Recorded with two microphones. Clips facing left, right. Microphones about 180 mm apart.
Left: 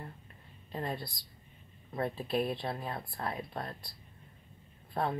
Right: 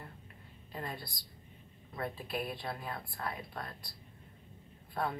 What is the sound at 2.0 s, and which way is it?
Speech, 30° left (ahead or behind).